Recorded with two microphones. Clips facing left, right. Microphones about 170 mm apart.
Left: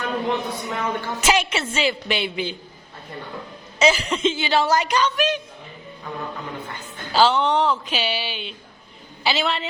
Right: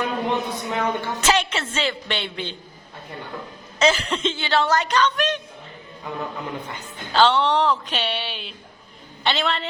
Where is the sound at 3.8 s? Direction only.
10° left (ahead or behind).